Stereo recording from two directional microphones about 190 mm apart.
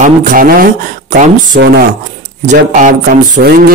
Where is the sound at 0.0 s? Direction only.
45° right (ahead or behind).